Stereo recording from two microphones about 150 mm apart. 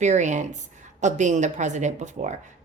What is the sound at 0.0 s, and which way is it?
A woman's voice, 50° right (ahead or behind).